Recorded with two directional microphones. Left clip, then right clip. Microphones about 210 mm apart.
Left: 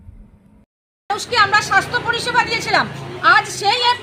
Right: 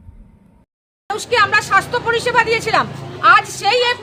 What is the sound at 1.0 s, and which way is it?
Speech, 25° right (ahead or behind).